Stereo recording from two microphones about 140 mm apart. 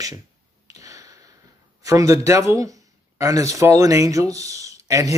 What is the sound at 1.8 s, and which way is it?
Speech, 20° right (ahead or behind).